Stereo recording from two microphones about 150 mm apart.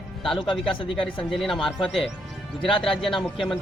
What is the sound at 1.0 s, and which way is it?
A man's voice, 5° left (ahead or behind).